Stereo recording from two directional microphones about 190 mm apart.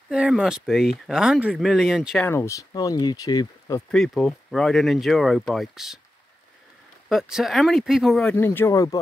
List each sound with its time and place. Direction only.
0.1 s speech: 5° right (ahead or behind)
2.2 s speech: 15° left (ahead or behind)
3.9 s speech: centre (ahead or behind)
7.1 s speech: centre (ahead or behind); by 9.0 s 15° left (ahead or behind)